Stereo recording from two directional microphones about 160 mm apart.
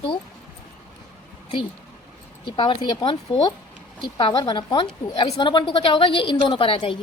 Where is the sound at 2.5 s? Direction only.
30° left (ahead or behind).